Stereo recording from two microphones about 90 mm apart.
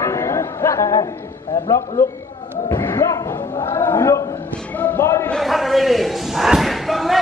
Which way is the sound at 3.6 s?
65° left (ahead or behind).